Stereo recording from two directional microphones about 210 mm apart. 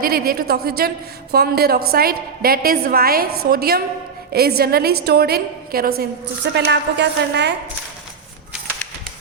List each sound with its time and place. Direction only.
0.0 s a woman's voice: 45° right (ahead or behind)